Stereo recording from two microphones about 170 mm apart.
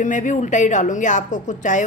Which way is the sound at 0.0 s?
45° left (ahead or behind).